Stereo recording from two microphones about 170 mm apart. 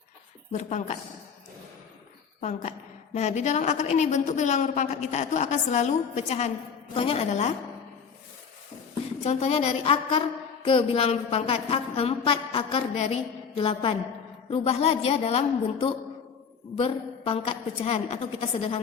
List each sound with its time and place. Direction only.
0.5 s a woman's voice: 45° left (ahead or behind)
2.4 s a woman's voice: 45° left (ahead or behind)
9.2 s a woman's voice: 40° left (ahead or behind)